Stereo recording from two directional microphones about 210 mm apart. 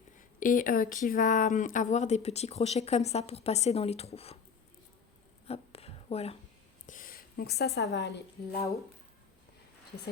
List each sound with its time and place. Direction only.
0.2 s speech: 40° left (ahead or behind)
5.5 s a sound: 30° left (ahead or behind)
6.8 s a woman's voice: 40° left (ahead or behind)